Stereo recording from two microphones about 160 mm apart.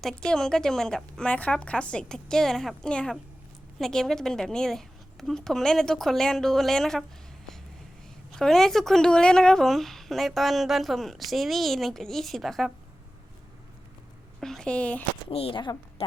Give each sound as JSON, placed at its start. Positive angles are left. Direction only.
{"t": 0.0, "sound": "a woman's voice", "side_deg": 5}
{"t": 8.3, "sound": "a woman's voice", "side_deg": 0}
{"t": 14.4, "sound": "speech", "side_deg": 5}
{"t": 15.3, "sound": "a woman's voice", "side_deg": 35}